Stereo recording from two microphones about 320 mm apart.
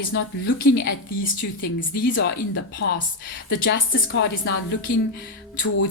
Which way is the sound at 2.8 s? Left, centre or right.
Left.